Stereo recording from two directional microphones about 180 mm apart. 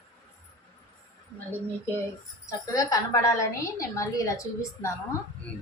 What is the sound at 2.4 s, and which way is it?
A woman's voice, 20° left (ahead or behind).